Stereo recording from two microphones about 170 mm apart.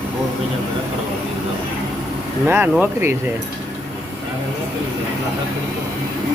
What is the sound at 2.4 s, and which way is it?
Speech, 10° right (ahead or behind).